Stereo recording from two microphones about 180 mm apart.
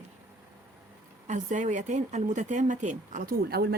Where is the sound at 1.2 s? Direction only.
45° right (ahead or behind).